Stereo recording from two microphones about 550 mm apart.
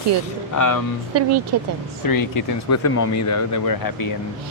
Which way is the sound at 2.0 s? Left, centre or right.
Left.